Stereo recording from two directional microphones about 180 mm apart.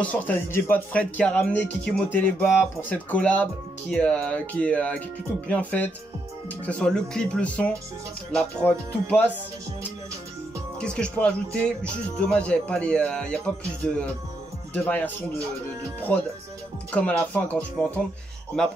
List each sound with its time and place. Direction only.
0.0 s speech: 10° left (ahead or behind)
10.8 s speech: 5° left (ahead or behind)
16.1 s speech: 10° left (ahead or behind)